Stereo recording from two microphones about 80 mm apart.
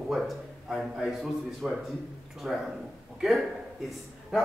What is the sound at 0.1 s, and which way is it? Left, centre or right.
A man's voice, centre.